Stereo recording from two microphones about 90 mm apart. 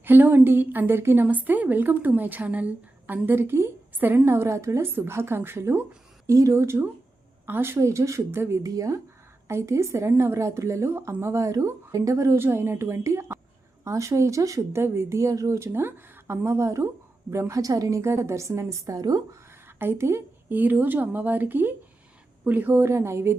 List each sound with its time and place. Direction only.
0.0 s a woman's voice: 20° right (ahead or behind); by 19.4 s 45° right (ahead or behind)
19.5 s a woman's voice: 25° right (ahead or behind)